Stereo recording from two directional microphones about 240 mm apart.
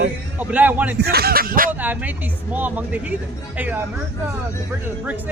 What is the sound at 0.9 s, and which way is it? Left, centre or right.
Speech, right.